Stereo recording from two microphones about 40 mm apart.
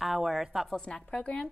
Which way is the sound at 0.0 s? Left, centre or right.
Centre.